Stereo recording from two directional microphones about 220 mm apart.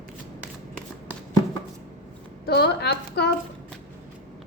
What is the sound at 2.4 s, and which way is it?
Speech, 45° left (ahead or behind).